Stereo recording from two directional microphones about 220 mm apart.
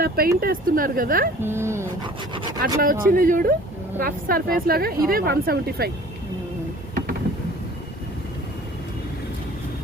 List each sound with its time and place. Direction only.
0.0 s speech: 45° right (ahead or behind)
1.4 s speech: 10° right (ahead or behind)
2.6 s speech: 40° right (ahead or behind)